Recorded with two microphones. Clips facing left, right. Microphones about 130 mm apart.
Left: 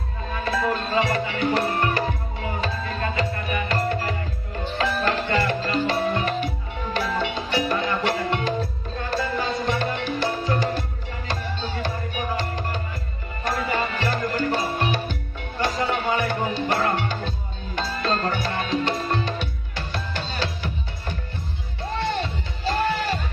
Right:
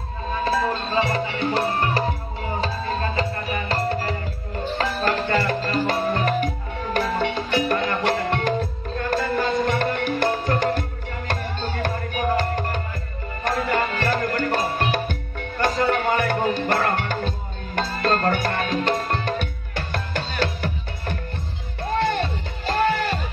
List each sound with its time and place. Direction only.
0.5 s music: 30° right (ahead or behind); by 23.1 s 50° right (ahead or behind)